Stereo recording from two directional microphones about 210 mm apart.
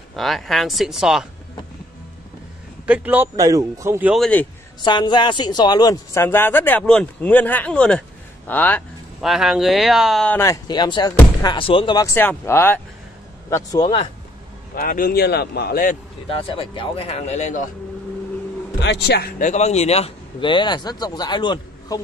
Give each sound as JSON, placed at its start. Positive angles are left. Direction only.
{"t": 0.1, "sound": "speech", "side_deg": 0}
{"t": 2.9, "sound": "a man's voice", "side_deg": -10}
{"t": 4.1, "sound": "speech", "side_deg": 5}
{"t": 4.8, "sound": "speech", "side_deg": 20}
{"t": 14.8, "sound": "speech", "side_deg": 45}
{"t": 16.3, "sound": "speech", "side_deg": 25}
{"t": 18.8, "sound": "speech", "side_deg": 55}